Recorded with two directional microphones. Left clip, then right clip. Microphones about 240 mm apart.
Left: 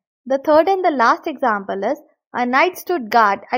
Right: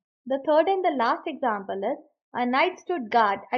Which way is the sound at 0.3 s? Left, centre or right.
Left.